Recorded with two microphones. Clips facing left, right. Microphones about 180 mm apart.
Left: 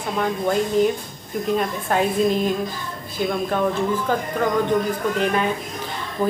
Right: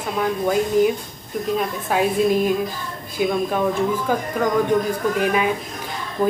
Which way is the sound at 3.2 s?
5° right (ahead or behind).